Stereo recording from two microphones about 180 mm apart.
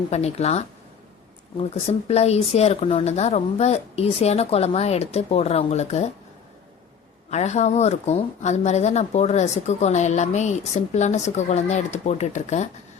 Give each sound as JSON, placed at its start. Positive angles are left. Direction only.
{"t": 0.1, "sound": "a woman's voice", "side_deg": 35}
{"t": 7.3, "sound": "a woman's voice", "side_deg": 40}